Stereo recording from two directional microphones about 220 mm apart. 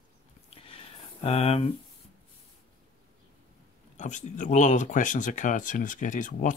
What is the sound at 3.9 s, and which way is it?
Speech, 35° left (ahead or behind).